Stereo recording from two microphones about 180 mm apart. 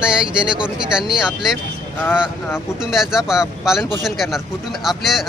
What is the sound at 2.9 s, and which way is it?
Speech, 5° right (ahead or behind).